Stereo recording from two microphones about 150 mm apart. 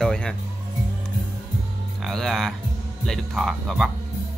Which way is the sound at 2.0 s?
Centre (ahead or behind).